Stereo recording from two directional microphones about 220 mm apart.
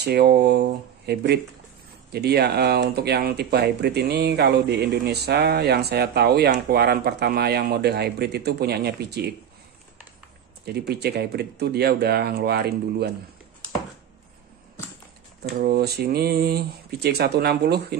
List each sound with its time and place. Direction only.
0.0 s speech: 45° right (ahead or behind)
10.6 s speech: 45° right (ahead or behind)
15.5 s speech: 45° right (ahead or behind)